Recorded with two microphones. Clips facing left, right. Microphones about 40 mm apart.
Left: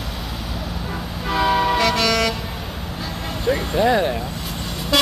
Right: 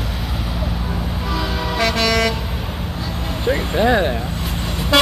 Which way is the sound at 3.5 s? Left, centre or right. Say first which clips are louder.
Right 1 dB; centre.